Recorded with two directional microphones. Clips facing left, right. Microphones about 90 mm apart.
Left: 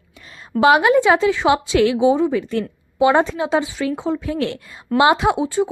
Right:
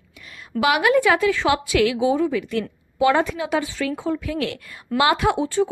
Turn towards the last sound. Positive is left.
turn(degrees=15)  # may be behind; listen again after turning